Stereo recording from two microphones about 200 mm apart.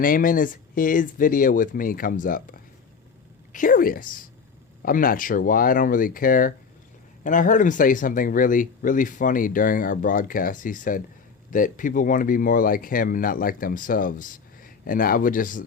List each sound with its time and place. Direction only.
0.0 s speech: 45° left (ahead or behind)